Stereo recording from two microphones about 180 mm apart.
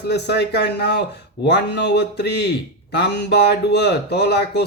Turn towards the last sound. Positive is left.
turn(degrees=65)  # may be behind; listen again after turning